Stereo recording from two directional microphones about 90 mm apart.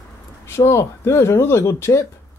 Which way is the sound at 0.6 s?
30° left (ahead or behind).